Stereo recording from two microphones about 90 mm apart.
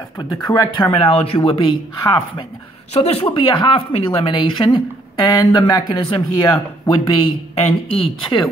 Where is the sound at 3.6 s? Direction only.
70° left (ahead or behind); by 6.9 s 55° left (ahead or behind).